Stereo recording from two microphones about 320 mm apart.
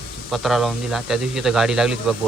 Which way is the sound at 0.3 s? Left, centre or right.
Centre.